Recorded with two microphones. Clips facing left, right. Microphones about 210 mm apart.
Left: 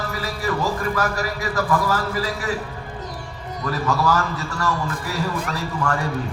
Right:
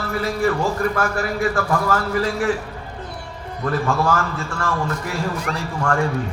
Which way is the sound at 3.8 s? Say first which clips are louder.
Left 2 dB; 40° left (ahead or behind).